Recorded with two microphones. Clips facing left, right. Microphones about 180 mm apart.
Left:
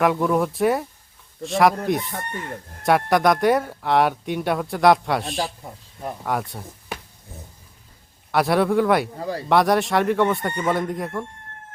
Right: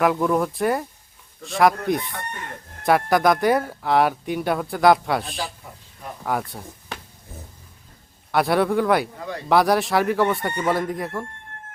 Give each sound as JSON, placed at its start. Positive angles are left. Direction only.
{"t": 0.0, "sound": "speech", "side_deg": 0}
{"t": 8.3, "sound": "speech", "side_deg": 0}
{"t": 9.1, "sound": "speech", "side_deg": 35}
{"t": 9.5, "sound": "speech", "side_deg": 0}